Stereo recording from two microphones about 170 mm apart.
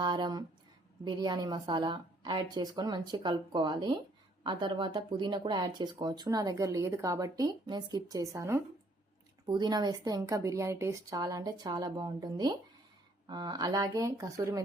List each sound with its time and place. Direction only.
0.0 s speech: 25° right (ahead or behind)